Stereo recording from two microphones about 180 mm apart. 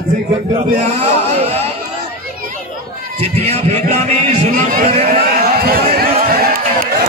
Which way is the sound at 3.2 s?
35° right (ahead or behind).